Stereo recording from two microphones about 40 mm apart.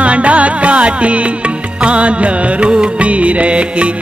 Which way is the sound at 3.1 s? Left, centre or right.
Right.